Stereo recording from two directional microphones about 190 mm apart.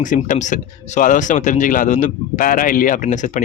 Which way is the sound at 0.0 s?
40° left (ahead or behind).